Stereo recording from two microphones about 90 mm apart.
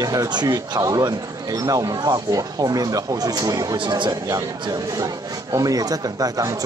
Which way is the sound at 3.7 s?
60° right (ahead or behind).